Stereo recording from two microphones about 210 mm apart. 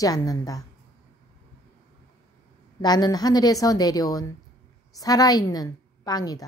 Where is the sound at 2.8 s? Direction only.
20° left (ahead or behind).